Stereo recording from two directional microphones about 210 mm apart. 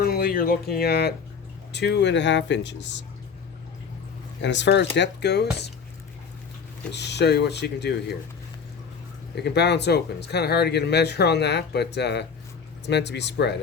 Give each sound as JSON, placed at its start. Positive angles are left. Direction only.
{"t": 0.0, "sound": "speech", "side_deg": 45}
{"t": 4.4, "sound": "speech", "side_deg": 55}
{"t": 6.9, "sound": "speech", "side_deg": 55}
{"t": 9.3, "sound": "speech", "side_deg": 55}